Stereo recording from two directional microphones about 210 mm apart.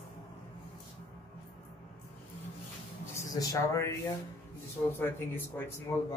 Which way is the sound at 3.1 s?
15° left (ahead or behind).